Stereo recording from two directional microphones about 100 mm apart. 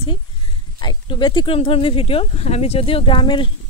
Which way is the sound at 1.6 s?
65° left (ahead or behind).